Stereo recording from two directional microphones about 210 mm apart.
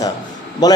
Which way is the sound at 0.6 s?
20° left (ahead or behind).